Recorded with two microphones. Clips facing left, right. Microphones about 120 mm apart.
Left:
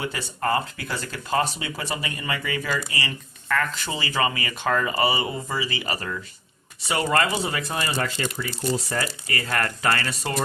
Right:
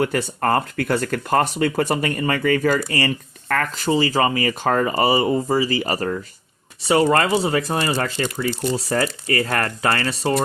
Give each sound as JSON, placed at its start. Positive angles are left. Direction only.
{"t": 0.0, "sound": "speech", "side_deg": -50}